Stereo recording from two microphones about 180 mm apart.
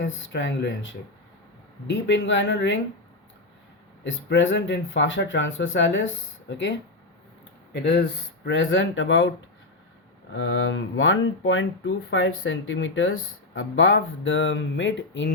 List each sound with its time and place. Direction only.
0.0 s speech: 90° left
4.0 s speech: 90° left
6.5 s speech: 75° left (ahead or behind)
7.7 s speech: 70° left (ahead or behind)
8.4 s speech: 90° left
10.3 s speech: 90° left